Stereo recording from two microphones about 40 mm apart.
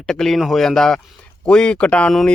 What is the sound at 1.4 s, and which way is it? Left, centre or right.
Speech, left.